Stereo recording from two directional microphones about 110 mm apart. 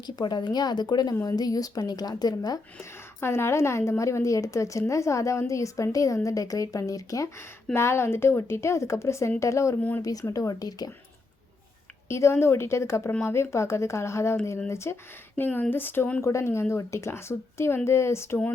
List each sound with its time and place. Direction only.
0.0 s a woman's voice: 40° left (ahead or behind)
2.7 s a woman's voice: 20° left (ahead or behind)
12.0 s a woman's voice: 25° left (ahead or behind)
16.2 s speech: 25° left (ahead or behind)